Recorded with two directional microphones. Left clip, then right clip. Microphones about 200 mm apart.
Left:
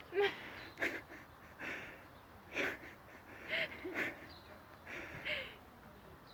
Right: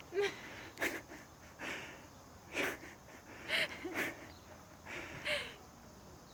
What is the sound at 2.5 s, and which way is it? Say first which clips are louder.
Wheeze: right 1 dB; 10° right (ahead or behind).